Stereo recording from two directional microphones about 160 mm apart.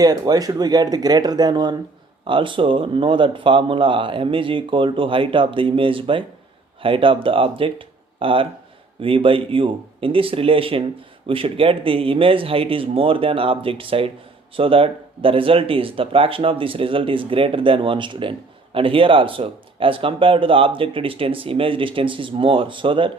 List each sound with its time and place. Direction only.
0.0 s speech: 25° right (ahead or behind)